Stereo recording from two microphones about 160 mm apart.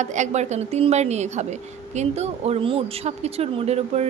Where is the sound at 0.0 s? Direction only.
50° right (ahead or behind).